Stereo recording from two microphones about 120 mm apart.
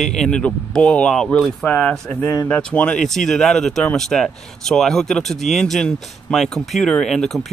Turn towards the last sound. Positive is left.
turn(degrees=5)  # may be behind; listen again after turning